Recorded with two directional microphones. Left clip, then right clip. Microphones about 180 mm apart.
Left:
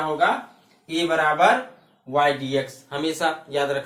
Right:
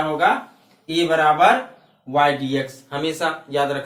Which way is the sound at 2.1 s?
25° left (ahead or behind).